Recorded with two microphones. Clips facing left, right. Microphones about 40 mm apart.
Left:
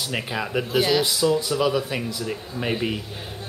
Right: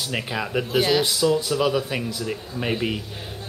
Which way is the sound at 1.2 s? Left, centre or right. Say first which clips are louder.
Even; right.